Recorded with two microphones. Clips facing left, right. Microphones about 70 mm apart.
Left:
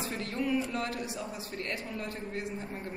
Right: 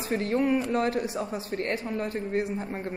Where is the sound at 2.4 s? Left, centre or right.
Right.